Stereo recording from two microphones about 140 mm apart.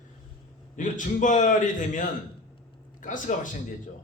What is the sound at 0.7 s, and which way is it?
A man's voice, 65° left (ahead or behind).